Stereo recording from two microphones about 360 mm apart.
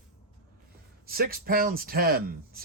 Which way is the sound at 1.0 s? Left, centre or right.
Right.